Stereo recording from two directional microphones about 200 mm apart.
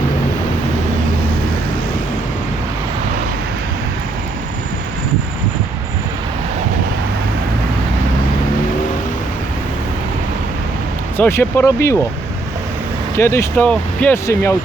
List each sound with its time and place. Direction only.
11.2 s speech: 15° left (ahead or behind)
13.1 s speech: 15° left (ahead or behind)